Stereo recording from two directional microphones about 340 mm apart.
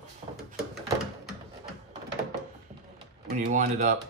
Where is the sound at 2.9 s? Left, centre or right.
Right.